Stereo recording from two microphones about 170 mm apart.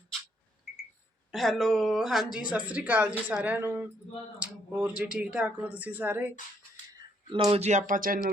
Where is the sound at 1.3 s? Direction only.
Centre (ahead or behind).